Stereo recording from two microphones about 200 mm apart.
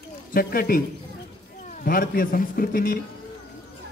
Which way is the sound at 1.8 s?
45° left (ahead or behind).